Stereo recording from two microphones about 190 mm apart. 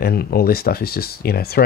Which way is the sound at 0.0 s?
55° left (ahead or behind).